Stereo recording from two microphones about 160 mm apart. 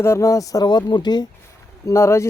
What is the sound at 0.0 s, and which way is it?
Speech, 15° left (ahead or behind).